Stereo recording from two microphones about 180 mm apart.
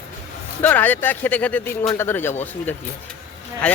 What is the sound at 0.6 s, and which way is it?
Speech, 10° left (ahead or behind).